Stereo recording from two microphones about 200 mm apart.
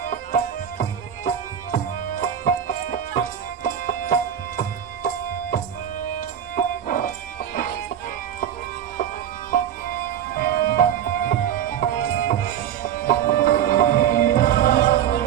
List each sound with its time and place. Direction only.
0.0 s music: 45° left (ahead or behind)
6.1 s music: 40° left (ahead or behind)
10.3 s music: 45° left (ahead or behind)